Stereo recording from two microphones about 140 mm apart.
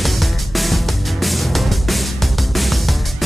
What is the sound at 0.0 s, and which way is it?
Music, centre (ahead or behind).